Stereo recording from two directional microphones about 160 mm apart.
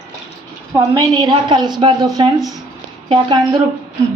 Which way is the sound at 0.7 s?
20° right (ahead or behind).